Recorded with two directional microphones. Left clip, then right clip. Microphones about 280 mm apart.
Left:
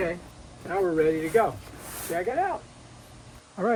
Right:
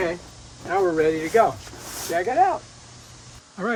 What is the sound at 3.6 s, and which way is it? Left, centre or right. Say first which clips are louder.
Speech: left 1 dB; centre.